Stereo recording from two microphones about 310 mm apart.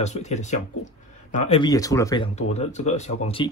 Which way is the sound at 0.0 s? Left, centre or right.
Left.